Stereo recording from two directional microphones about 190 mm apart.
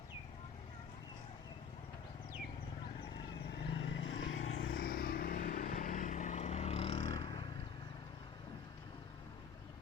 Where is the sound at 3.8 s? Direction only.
80° left.